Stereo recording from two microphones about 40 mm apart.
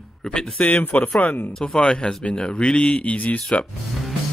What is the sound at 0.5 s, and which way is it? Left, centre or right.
Speech, left.